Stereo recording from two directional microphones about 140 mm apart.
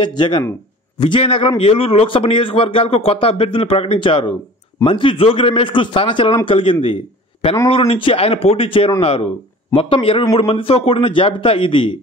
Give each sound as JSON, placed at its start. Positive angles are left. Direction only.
{"t": 0.0, "sound": "a man's voice", "side_deg": 35}